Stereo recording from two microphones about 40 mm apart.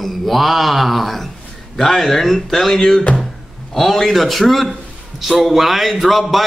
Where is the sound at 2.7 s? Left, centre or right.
Centre.